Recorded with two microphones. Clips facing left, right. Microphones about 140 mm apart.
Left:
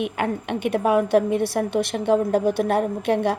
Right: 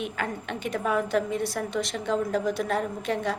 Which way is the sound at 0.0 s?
60° left (ahead or behind).